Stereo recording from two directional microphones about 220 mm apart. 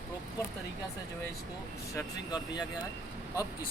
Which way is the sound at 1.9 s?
20° left (ahead or behind).